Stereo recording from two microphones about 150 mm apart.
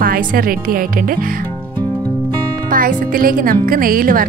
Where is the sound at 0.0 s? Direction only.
70° right (ahead or behind).